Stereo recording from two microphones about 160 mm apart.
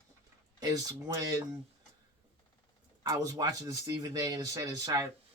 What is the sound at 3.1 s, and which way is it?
Speech, 25° right (ahead or behind).